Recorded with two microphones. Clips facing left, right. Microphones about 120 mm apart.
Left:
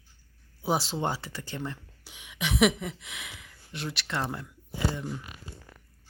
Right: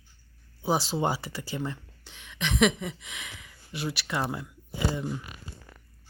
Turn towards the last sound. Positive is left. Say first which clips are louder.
# right 2 dB
turn(degrees=-10)  # may be behind; listen again after turning